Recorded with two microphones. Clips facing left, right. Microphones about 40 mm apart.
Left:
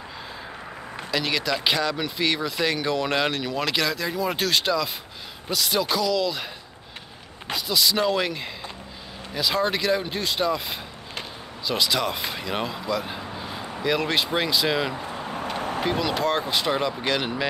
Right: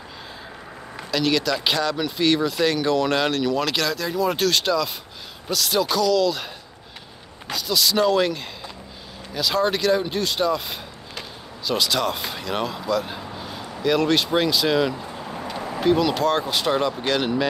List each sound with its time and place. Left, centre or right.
0.9 s speech: centre
7.4 s speech: centre
15.0 s vehicle: left
15.8 s speech: centre